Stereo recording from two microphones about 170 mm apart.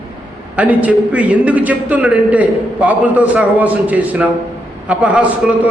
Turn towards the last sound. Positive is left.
turn(degrees=-5)  # may be behind; listen again after turning